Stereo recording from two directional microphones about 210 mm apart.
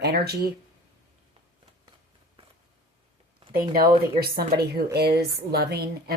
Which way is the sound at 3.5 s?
45° right (ahead or behind).